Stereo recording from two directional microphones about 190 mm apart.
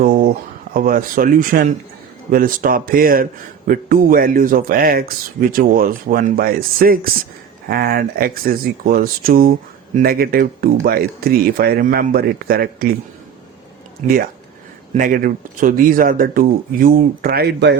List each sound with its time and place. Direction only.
0.0 s a sound: 50° right (ahead or behind)
0.7 s speech: 50° right (ahead or behind)
14.0 s speech: 40° right (ahead or behind); by 17.7 s 60° right (ahead or behind)